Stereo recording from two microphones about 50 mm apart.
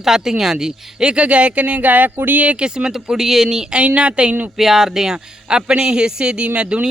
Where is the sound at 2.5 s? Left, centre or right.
Centre.